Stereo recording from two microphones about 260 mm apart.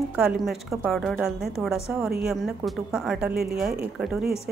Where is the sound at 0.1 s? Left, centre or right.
Centre.